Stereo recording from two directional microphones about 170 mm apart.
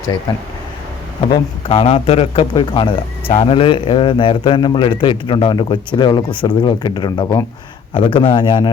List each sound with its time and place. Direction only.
1.3 s speech: 35° left (ahead or behind)